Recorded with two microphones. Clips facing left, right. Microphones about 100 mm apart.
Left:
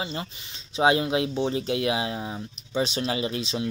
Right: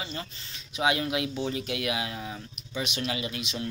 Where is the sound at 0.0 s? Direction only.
30° left (ahead or behind).